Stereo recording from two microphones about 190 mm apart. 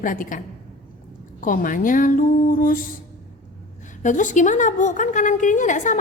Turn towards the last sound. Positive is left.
turn(degrees=40)  # may be behind; listen again after turning